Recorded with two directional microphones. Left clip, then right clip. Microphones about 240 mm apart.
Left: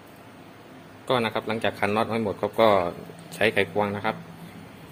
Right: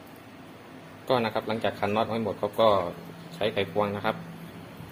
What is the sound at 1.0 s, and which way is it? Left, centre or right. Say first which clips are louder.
A man's voice: left 1 dB; centre.